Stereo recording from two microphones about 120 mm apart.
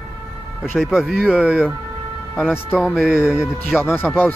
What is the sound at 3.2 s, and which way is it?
Speech, 20° left (ahead or behind).